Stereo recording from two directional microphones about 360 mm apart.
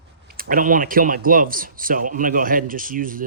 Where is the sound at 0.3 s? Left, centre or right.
Right.